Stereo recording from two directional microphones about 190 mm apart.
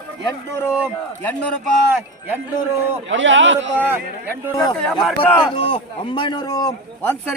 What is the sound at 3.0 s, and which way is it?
Speech, 75° right (ahead or behind).